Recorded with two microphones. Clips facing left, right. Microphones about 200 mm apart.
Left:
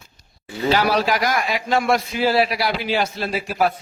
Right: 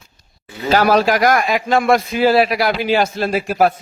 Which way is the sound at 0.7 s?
45° right (ahead or behind).